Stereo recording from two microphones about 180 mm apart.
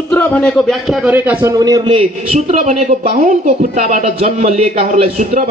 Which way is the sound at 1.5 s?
20° right (ahead or behind).